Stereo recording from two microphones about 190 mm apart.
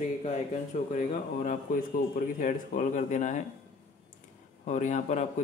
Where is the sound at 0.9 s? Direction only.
45° left (ahead or behind).